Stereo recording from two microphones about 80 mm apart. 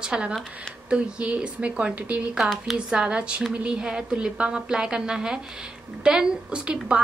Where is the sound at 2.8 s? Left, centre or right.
Centre.